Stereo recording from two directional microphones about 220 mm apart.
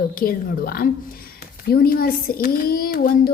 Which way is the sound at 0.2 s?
40° left (ahead or behind).